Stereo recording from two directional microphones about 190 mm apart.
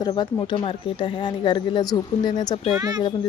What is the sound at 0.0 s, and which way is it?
Speech, 25° left (ahead or behind).